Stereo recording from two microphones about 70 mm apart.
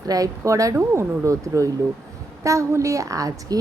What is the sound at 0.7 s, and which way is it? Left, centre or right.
A woman's voice, right.